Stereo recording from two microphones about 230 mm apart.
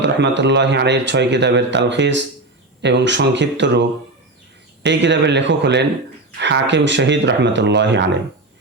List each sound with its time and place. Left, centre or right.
0.0 s speech: right